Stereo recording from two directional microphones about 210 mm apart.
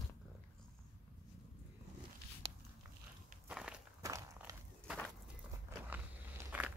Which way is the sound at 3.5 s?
5° right (ahead or behind).